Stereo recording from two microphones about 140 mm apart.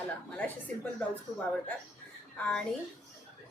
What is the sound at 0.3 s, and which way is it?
Speech, 10° left (ahead or behind).